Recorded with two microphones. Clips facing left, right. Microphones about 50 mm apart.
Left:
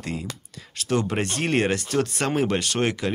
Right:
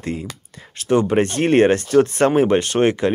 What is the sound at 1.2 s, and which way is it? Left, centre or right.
Speech, right.